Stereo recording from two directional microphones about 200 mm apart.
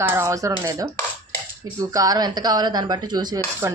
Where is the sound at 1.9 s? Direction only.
20° right (ahead or behind).